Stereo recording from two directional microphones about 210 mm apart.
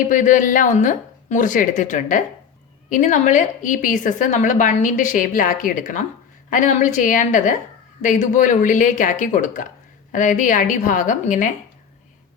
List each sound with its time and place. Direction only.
0.0 s a woman's voice: 35° left (ahead or behind)